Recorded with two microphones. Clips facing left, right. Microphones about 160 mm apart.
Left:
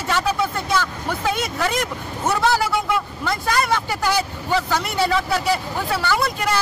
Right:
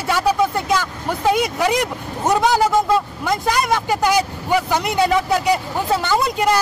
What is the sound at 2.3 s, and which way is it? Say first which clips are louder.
Speech: right 4 dB; 15° right (ahead or behind).